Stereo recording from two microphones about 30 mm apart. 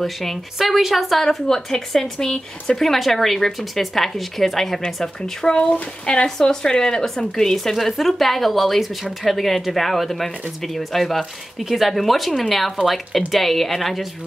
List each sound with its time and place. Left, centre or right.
0.0 s speech: centre
0.6 s speech: centre
1.5 s speech: centre
2.0 s speech: left
2.9 s speech: centre
5.5 s speech: left
6.2 s speech: centre
7.7 s speech: centre